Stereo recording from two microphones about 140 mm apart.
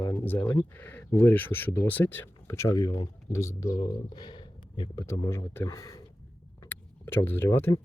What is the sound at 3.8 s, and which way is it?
Speech, 35° left (ahead or behind).